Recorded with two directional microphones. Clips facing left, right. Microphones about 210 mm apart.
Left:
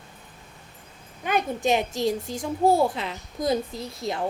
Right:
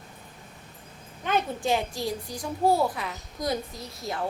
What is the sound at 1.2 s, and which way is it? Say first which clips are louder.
A woman's voice: left 2 dB; 15° left (ahead or behind).